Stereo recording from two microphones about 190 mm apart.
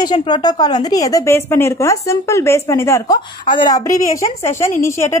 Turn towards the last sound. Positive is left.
turn(degrees=15)  # may be behind; listen again after turning